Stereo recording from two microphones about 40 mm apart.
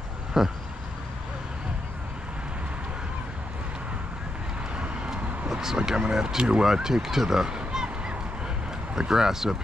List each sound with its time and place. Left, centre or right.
0.3 s speech: centre
4.7 s vehicle: right
5.5 s vehicle: centre
5.9 s speech: right